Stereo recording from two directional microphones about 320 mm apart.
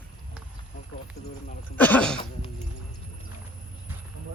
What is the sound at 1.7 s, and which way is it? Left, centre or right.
Speech, centre.